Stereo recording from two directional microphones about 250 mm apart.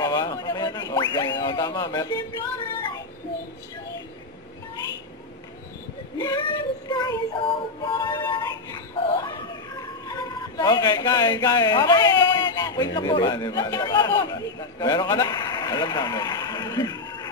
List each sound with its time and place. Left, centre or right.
0.0 s speech: centre
6.1 s speech: centre
6.9 s synthetic singing: centre
9.0 s a sound: centre
12.9 s speech: centre